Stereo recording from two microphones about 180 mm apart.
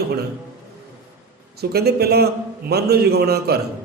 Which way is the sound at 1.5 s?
60° right (ahead or behind).